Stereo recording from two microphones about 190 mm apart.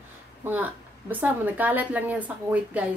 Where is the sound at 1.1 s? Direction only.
10° right (ahead or behind).